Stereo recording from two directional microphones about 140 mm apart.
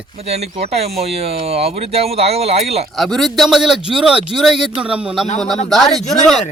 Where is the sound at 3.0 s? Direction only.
Centre (ahead or behind).